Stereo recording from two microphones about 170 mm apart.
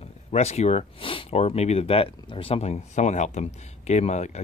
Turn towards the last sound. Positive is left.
turn(degrees=40)  # may be behind; listen again after turning